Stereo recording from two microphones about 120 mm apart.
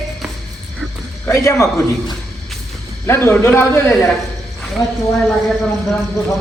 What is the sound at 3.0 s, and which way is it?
Speech, 20° left (ahead or behind).